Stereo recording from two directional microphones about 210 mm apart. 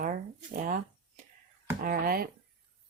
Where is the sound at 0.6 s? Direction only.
40° right (ahead or behind).